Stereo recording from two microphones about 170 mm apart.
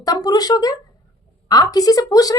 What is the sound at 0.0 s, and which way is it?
A woman's voice, 25° left (ahead or behind).